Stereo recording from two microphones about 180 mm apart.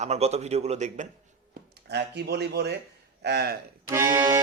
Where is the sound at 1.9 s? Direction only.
70° right (ahead or behind).